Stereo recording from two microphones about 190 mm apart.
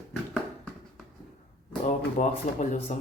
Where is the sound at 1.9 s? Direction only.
40° left (ahead or behind).